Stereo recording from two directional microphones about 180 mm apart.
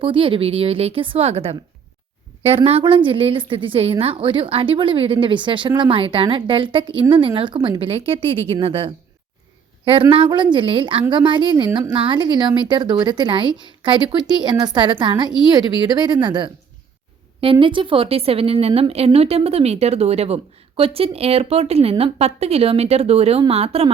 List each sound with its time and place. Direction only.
0.0 s a woman's voice: 30° right (ahead or behind)